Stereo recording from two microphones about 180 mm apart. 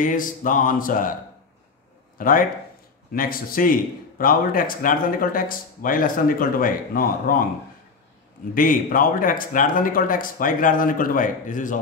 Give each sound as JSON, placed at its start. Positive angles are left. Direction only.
{"t": 0.0, "sound": "speech", "side_deg": 50}
{"t": 2.1, "sound": "speech", "side_deg": 50}
{"t": 8.5, "sound": "speech", "side_deg": 50}